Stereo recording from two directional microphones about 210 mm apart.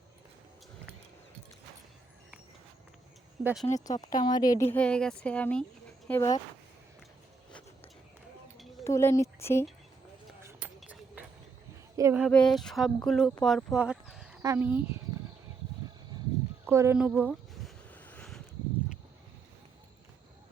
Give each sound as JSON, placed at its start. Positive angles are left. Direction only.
{"t": 3.4, "sound": "speech", "side_deg": 0}
{"t": 3.8, "sound": "speech", "side_deg": 15}
{"t": 4.7, "sound": "speech", "side_deg": 5}
{"t": 8.8, "sound": "speech", "side_deg": 15}
{"t": 10.8, "sound": "a sound", "side_deg": -5}
{"t": 11.9, "sound": "speech", "side_deg": -15}
{"t": 12.2, "sound": "speech", "side_deg": 5}
{"t": 16.1, "sound": "a sound", "side_deg": -20}